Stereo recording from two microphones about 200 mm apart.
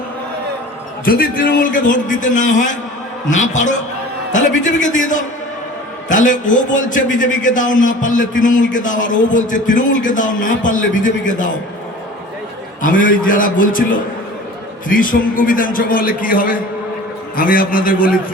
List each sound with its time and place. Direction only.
1.0 s a man's voice: 45° left (ahead or behind)
12.8 s a man's voice: 45° left (ahead or behind)